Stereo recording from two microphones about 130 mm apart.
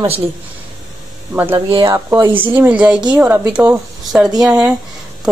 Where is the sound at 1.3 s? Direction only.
15° right (ahead or behind).